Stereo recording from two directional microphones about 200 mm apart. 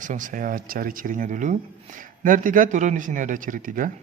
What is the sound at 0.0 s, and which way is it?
Speech, 40° right (ahead or behind).